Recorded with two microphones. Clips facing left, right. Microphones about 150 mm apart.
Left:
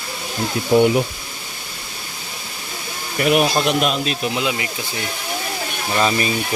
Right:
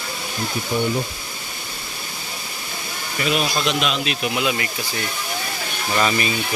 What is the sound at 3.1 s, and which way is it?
Speech, 55° left (ahead or behind).